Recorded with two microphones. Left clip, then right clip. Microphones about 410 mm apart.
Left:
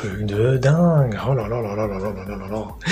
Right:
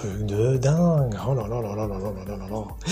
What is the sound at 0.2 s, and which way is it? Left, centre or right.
Speech, left.